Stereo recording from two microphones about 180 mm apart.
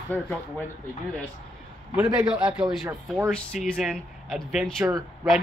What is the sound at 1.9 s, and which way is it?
Speech, 5° right (ahead or behind).